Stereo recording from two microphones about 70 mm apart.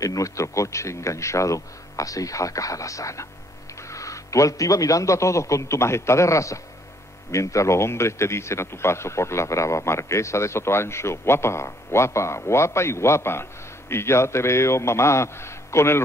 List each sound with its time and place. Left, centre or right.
0.0 s a man's voice: left